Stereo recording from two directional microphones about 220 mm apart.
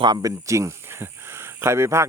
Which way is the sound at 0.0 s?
15° right (ahead or behind).